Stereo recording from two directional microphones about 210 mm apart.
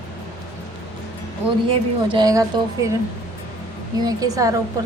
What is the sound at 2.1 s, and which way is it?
Speech, 15° right (ahead or behind).